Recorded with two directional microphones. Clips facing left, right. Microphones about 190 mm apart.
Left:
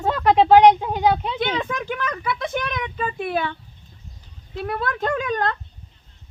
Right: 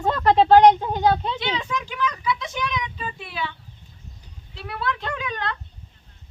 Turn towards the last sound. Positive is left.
turn(degrees=45)  # may be behind; listen again after turning